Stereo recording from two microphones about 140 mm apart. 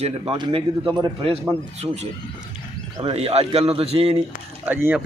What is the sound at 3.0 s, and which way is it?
A man's voice, 45° right (ahead or behind).